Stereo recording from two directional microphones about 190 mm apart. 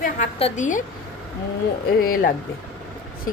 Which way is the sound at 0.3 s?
35° left (ahead or behind).